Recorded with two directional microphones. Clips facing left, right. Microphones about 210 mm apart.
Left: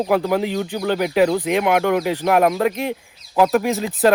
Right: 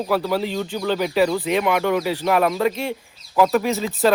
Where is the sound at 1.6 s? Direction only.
55° left (ahead or behind).